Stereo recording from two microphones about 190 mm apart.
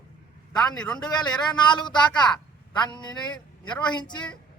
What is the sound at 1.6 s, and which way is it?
Speech, 25° left (ahead or behind).